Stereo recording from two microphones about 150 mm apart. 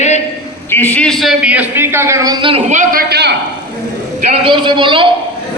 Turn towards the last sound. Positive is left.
turn(degrees=-35)  # may be behind; listen again after turning